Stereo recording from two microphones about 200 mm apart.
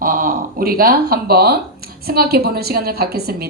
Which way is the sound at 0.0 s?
45° right (ahead or behind).